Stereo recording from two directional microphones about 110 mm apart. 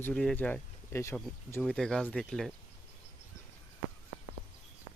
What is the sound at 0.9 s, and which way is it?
Speech, 25° left (ahead or behind).